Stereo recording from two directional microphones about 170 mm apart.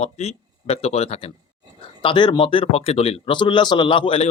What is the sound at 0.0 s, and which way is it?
Speech, 40° left (ahead or behind).